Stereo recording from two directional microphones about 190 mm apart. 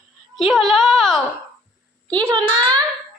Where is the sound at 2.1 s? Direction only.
25° right (ahead or behind).